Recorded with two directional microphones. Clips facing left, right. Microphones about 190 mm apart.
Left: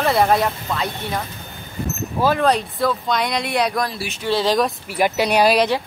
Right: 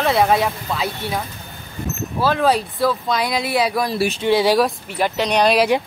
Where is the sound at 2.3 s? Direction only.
Centre (ahead or behind).